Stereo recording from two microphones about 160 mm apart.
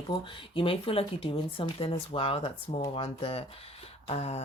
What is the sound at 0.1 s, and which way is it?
Speech, 30° left (ahead or behind).